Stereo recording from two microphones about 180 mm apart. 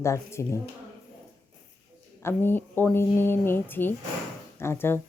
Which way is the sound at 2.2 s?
15° left (ahead or behind).